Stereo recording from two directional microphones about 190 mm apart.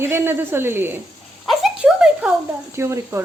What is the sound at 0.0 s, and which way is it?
Speech, 10° right (ahead or behind).